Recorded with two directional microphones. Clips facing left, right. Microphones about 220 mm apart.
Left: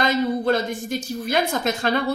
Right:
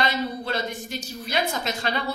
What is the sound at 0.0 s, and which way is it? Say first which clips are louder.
A woman's voice: left 6 dB; 50° left (ahead or behind).